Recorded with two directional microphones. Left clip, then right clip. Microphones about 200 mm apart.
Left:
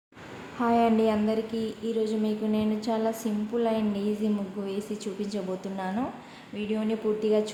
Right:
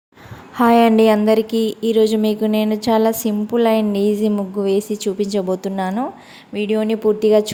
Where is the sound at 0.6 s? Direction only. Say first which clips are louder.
Right 11 dB; 40° right (ahead or behind).